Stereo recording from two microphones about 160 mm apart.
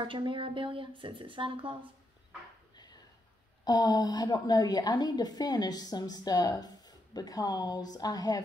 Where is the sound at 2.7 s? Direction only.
25° left (ahead or behind).